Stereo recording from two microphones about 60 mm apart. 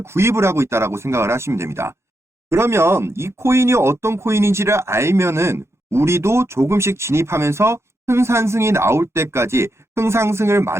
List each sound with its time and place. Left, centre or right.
0.0 s speech: right